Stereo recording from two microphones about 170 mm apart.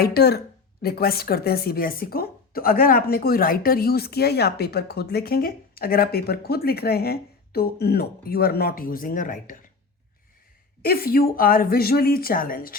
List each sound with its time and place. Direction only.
0.0 s speech: 65° left (ahead or behind); by 9.6 s 50° left (ahead or behind)
10.8 s speech: 60° left (ahead or behind)